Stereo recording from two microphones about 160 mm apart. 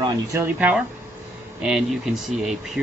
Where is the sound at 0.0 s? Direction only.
20° right (ahead or behind).